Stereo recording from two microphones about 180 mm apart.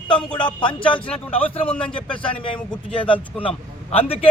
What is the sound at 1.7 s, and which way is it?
Speech, 5° left (ahead or behind).